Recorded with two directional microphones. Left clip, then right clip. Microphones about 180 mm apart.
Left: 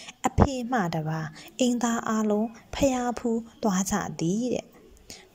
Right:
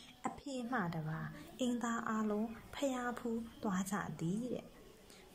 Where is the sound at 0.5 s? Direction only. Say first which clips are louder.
Left 12 dB; 30° left (ahead or behind).